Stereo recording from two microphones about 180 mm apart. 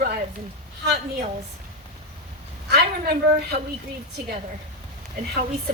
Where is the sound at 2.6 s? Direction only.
65° right (ahead or behind).